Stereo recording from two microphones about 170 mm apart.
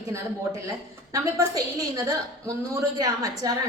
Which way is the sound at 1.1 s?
20° right (ahead or behind).